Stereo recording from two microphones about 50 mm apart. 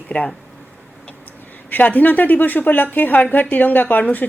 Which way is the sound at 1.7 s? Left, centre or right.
Left.